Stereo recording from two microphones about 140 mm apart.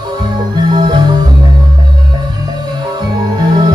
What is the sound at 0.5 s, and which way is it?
Music, 30° right (ahead or behind).